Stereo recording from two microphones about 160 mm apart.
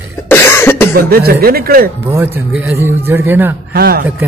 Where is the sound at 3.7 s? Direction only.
70° right (ahead or behind).